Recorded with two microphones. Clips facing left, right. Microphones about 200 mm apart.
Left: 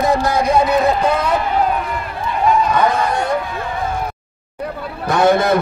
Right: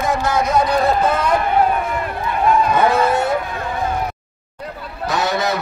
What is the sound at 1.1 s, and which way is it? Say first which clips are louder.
Speech: even; 5° left (ahead or behind).